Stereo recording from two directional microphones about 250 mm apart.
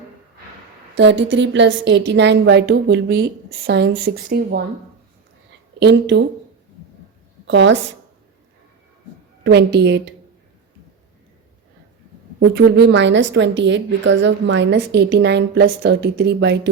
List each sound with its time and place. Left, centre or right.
0.9 s a woman's voice: right
5.8 s a woman's voice: right
7.4 s a woman's voice: right
9.4 s a woman's voice: right
12.5 s a woman's voice: right